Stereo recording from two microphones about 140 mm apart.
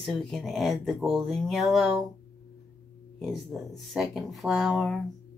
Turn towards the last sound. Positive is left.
turn(degrees=0)  # may be behind; listen again after turning